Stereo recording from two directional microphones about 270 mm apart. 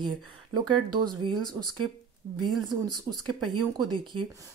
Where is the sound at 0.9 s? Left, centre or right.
Centre.